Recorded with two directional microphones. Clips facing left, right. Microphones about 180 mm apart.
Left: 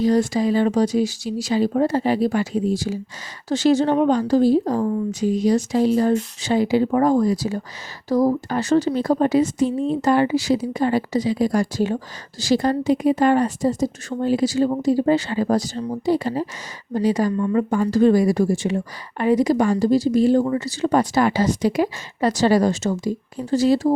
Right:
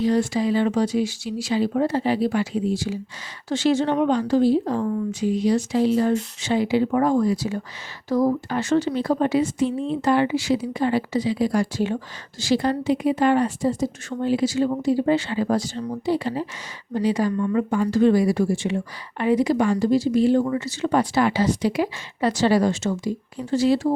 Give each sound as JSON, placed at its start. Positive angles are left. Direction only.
{"t": 0.0, "sound": "speech", "side_deg": 40}